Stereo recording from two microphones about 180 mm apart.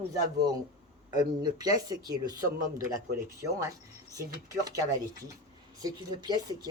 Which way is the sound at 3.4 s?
15° right (ahead or behind).